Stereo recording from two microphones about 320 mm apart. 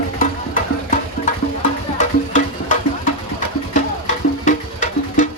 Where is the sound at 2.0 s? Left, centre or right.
Left.